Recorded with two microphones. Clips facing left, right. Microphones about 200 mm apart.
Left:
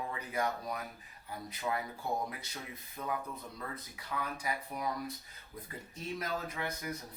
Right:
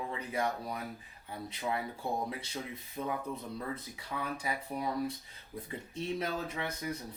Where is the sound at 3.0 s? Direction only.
25° right (ahead or behind).